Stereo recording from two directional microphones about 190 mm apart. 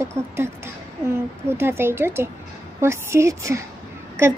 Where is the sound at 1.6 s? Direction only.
10° right (ahead or behind).